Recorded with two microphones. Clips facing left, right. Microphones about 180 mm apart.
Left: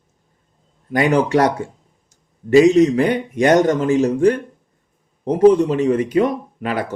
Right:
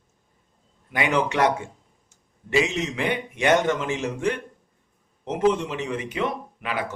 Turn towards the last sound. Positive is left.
turn(degrees=45)  # may be behind; listen again after turning